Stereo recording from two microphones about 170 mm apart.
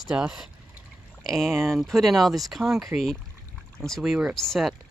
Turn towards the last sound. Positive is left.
turn(degrees=0)  # may be behind; listen again after turning